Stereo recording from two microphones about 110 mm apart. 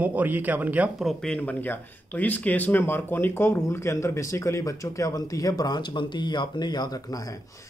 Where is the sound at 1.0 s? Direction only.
Centre (ahead or behind).